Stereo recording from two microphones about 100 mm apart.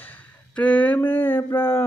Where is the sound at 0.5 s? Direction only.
15° left (ahead or behind).